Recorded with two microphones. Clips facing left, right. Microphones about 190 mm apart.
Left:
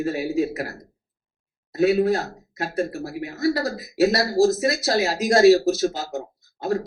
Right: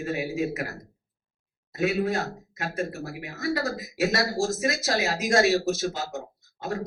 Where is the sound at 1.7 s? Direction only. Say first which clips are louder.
Left 7 dB; 35° left (ahead or behind).